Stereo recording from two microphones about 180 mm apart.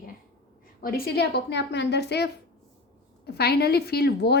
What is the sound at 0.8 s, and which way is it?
A woman's voice, 55° left (ahead or behind).